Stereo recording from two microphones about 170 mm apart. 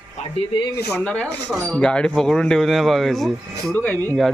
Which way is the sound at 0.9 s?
10° left (ahead or behind).